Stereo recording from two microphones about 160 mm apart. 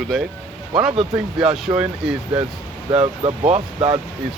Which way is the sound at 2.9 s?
35° right (ahead or behind).